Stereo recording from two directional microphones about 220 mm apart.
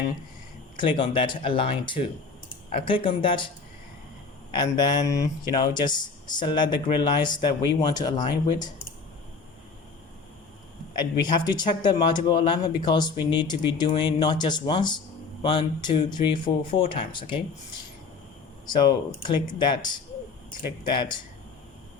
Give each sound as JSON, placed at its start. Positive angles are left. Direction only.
{"t": 0.8, "sound": "speech", "side_deg": 20}
{"t": 4.5, "sound": "speech", "side_deg": 20}
{"t": 10.9, "sound": "speech", "side_deg": 20}
{"t": 18.6, "sound": "speech", "side_deg": 20}
{"t": 20.9, "sound": "speech", "side_deg": 20}